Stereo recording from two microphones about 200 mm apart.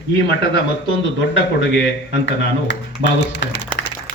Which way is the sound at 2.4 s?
60° left (ahead or behind).